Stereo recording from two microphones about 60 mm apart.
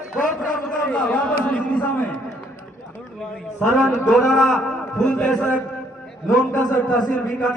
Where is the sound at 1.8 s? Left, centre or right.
Left.